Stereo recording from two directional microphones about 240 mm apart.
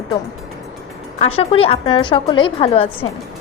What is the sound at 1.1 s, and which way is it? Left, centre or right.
Speech, left.